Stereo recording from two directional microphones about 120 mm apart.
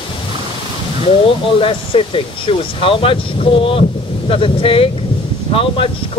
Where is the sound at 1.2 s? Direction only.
50° left (ahead or behind).